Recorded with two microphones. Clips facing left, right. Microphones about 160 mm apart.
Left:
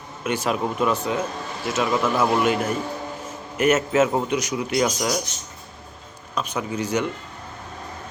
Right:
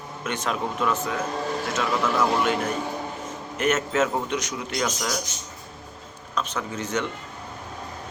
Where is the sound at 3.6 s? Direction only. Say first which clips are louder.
Left 4 dB; 10° left (ahead or behind).